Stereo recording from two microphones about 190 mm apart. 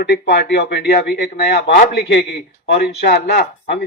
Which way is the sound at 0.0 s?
60° left (ahead or behind).